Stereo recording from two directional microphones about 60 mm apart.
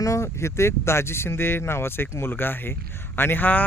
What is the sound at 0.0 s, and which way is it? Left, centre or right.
Speech, left.